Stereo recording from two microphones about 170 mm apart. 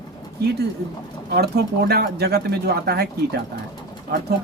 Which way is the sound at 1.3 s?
70° right (ahead or behind).